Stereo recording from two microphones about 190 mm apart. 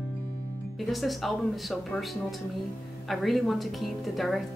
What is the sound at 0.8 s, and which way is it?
Speech, centre (ahead or behind).